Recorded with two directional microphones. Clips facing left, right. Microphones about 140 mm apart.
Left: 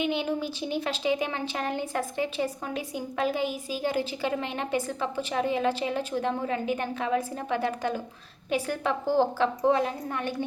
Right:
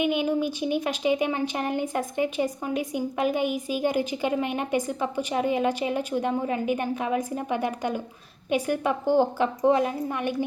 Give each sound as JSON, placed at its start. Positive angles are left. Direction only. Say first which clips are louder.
{"t": 0.0, "sound": "speech", "louder": "right 4 dB", "side_deg": -15}